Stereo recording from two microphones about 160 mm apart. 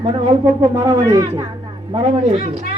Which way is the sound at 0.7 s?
20° right (ahead or behind).